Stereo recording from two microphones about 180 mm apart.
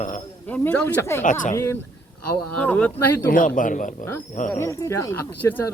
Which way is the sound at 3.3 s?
50° left (ahead or behind).